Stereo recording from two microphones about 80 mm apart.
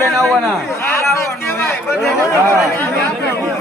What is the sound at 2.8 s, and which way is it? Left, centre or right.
Speech, right.